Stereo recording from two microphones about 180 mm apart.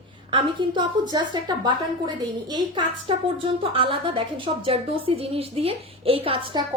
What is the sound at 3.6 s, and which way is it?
A woman's voice, 30° right (ahead or behind).